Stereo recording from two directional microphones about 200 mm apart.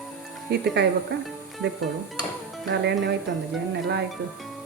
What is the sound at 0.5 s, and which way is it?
Speech, 55° right (ahead or behind).